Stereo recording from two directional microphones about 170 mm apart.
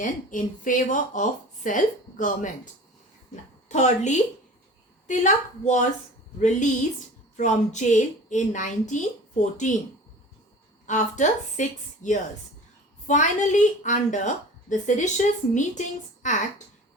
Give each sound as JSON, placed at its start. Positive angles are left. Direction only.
{"t": 0.0, "sound": "a woman's voice", "side_deg": 50}
{"t": 3.7, "sound": "a woman's voice", "side_deg": 45}
{"t": 7.3, "sound": "a woman's voice", "side_deg": 45}
{"t": 10.8, "sound": "a woman's voice", "side_deg": 45}